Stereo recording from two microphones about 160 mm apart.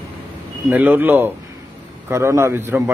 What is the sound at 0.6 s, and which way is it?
A man's voice, 10° right (ahead or behind).